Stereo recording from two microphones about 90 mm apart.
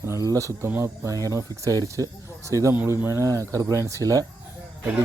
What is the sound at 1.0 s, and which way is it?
Speech, 40° right (ahead or behind).